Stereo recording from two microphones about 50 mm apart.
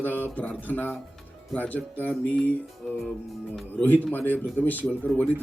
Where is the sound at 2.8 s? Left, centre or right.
Centre.